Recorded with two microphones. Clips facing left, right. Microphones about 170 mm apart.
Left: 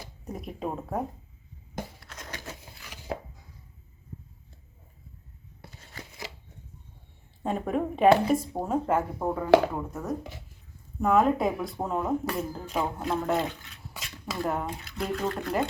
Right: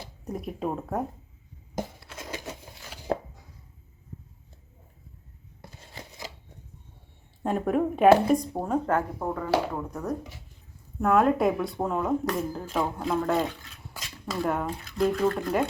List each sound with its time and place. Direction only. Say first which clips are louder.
0.3 s speech: right 3 dB; centre (ahead or behind)
2.2 s a sound: right 4 dB; 15° right (ahead or behind)
3.1 s chopping: right 6 dB; 50° right (ahead or behind)
7.4 s speech: right 3 dB; centre (ahead or behind)